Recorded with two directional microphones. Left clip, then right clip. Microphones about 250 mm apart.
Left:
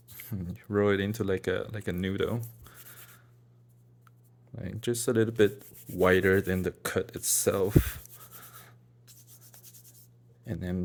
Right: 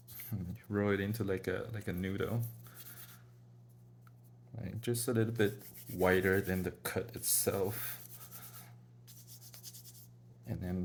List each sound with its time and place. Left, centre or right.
0.1 s speech: left
4.5 s speech: left
8.4 s writing: left
10.4 s a man's voice: left